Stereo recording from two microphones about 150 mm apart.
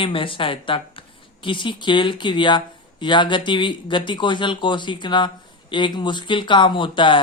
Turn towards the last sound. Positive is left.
turn(degrees=35)  # may be behind; listen again after turning